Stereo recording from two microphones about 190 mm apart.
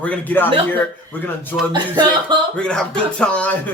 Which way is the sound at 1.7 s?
20° right (ahead or behind).